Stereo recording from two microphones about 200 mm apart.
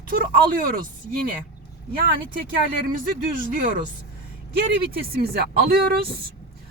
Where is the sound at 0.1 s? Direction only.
45° right (ahead or behind).